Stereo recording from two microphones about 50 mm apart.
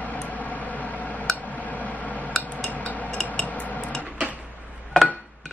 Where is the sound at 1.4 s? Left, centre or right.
Left.